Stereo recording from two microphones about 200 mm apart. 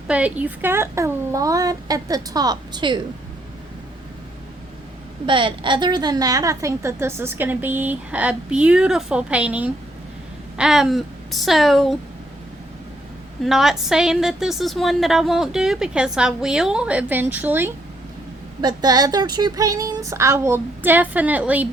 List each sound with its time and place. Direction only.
0.1 s a woman's voice: 5° right (ahead or behind); by 3.0 s 20° right (ahead or behind)
5.2 s a woman's voice: 25° right (ahead or behind); by 11.9 s centre (ahead or behind)
13.4 s a woman's voice: centre (ahead or behind)
18.6 s a woman's voice: 20° right (ahead or behind)